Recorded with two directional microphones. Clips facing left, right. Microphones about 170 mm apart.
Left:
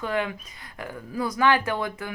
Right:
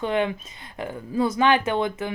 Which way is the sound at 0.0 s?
25° right (ahead or behind).